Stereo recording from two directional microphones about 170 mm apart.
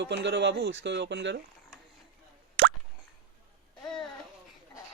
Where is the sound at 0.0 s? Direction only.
90° right.